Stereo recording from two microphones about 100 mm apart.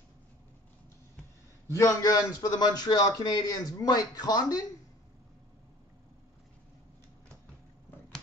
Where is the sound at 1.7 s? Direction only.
35° left (ahead or behind).